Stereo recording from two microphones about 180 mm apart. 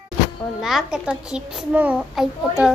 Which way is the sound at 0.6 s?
Centre (ahead or behind).